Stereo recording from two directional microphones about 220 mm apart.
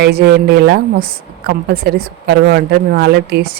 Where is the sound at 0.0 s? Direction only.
45° right (ahead or behind).